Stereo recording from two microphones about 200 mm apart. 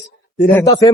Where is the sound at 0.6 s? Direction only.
20° left (ahead or behind).